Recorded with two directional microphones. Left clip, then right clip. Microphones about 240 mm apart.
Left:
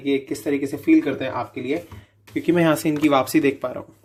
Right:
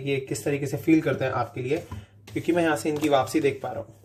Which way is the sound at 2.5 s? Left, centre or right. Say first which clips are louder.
Left 4 dB; left.